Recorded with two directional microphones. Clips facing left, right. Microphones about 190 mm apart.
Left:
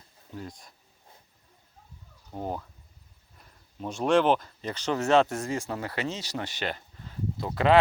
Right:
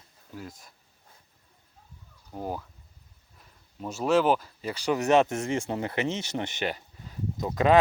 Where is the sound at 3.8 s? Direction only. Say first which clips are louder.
Even; 5° right (ahead or behind).